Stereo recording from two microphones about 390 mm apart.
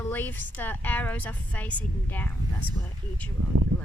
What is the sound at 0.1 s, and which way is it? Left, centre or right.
Speech, centre.